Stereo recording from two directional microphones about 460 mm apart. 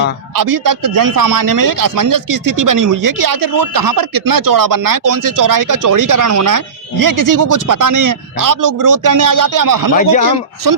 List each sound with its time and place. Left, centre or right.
0.3 s a man's voice: right
9.9 s speech: centre
10.2 s a man's voice: right